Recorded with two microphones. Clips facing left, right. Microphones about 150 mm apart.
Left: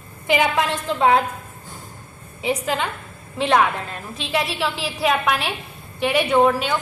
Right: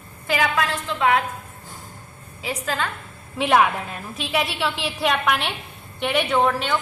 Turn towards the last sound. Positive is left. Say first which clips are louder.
# left 4 dB
turn(degrees=10)  # may be behind; listen again after turning